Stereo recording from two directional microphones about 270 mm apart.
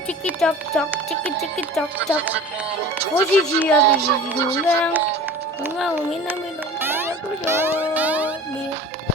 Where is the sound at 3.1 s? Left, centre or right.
Centre.